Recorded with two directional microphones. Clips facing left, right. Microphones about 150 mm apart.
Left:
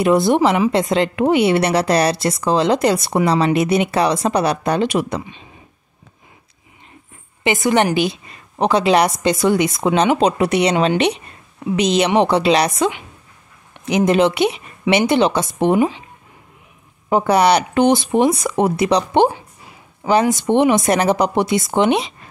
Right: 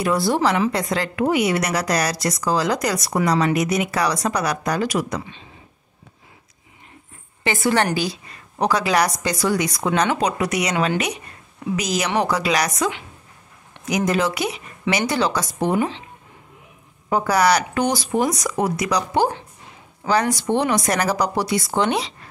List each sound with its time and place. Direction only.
0.0 s a woman's voice: 20° left (ahead or behind)
7.4 s a woman's voice: 20° left (ahead or behind)
17.1 s a woman's voice: 25° left (ahead or behind)
19.3 s a sound: 10° left (ahead or behind)
20.0 s a woman's voice: 25° left (ahead or behind)